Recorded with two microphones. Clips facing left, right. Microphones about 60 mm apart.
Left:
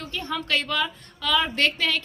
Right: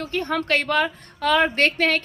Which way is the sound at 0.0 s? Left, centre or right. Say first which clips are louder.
Right 6 dB; right.